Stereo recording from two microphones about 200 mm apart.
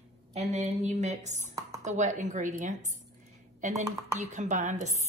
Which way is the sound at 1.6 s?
15° right (ahead or behind).